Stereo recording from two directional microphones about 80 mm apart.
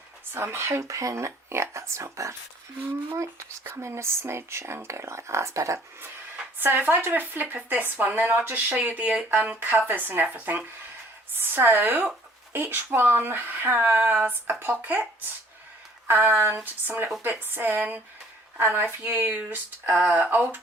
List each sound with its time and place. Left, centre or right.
0.3 s speech: right
6.0 s speech: right
16.0 s speech: right